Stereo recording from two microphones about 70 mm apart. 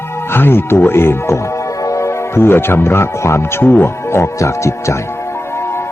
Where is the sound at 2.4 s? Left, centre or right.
Left.